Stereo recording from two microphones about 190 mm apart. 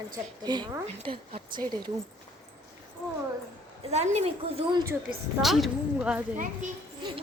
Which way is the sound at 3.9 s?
35° right (ahead or behind).